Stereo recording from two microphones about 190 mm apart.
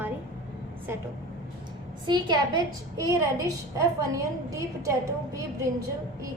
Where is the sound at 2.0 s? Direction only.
25° right (ahead or behind).